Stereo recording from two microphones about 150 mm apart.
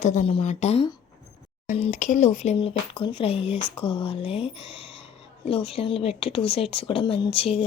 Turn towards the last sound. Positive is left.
turn(degrees=40)  # may be behind; listen again after turning